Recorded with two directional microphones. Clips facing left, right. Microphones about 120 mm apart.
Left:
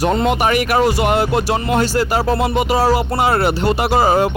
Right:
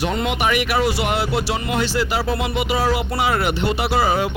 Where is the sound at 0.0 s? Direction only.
40° left (ahead or behind).